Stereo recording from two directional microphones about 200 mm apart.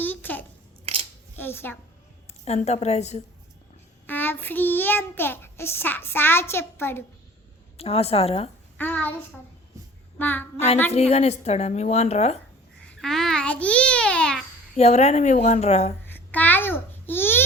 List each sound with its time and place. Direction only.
0.0 s a sound: 10° left (ahead or behind)
0.9 s a sound: 30° right (ahead or behind)
1.4 s a woman's voice: 10° left (ahead or behind)
2.4 s a woman's voice: 30° left (ahead or behind)
4.0 s child singing: 10° left (ahead or behind)
7.8 s a woman's voice: 30° left (ahead or behind)
8.8 s child singing: 10° left (ahead or behind)
10.2 s child singing: 10° left (ahead or behind)
10.9 s a woman's voice: 30° left (ahead or behind)
12.9 s babbling: centre (ahead or behind)
14.8 s a woman's voice: 35° left (ahead or behind)
16.0 s babbling: 10° left (ahead or behind)